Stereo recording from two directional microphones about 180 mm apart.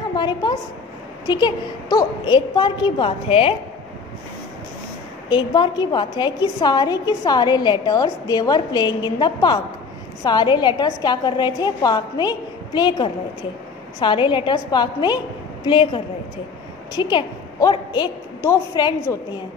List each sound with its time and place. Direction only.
0.1 s a woman's voice: 25° left (ahead or behind)
5.3 s a woman's voice: 25° left (ahead or behind)